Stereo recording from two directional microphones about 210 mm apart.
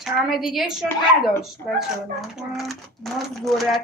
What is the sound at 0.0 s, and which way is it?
Speech, centre (ahead or behind).